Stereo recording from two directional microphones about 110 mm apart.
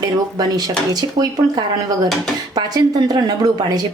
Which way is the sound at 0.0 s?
35° right (ahead or behind).